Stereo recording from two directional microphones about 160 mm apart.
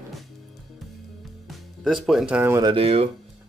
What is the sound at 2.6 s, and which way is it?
Speech, 35° right (ahead or behind).